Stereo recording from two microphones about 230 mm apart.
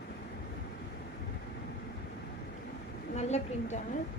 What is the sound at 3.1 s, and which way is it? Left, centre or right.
Speech, left.